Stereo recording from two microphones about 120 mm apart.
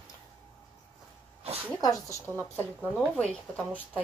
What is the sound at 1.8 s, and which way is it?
Speech, 25° left (ahead or behind).